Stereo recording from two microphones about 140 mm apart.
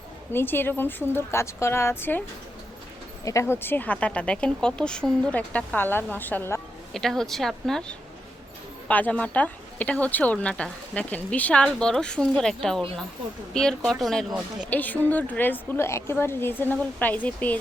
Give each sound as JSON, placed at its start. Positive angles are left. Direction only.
{"t": 0.3, "sound": "speech", "side_deg": 15}
{"t": 3.2, "sound": "speech", "side_deg": 20}
{"t": 6.9, "sound": "speech", "side_deg": 0}
{"t": 14.7, "sound": "speech", "side_deg": 10}